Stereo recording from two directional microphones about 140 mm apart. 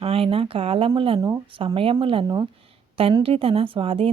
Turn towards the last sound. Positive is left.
turn(degrees=-40)  # may be behind; listen again after turning